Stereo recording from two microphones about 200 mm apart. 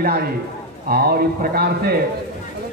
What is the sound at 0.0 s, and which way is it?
Speech, 50° right (ahead or behind).